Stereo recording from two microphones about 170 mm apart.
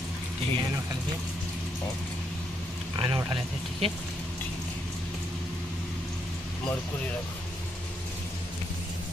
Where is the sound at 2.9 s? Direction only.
30° right (ahead or behind).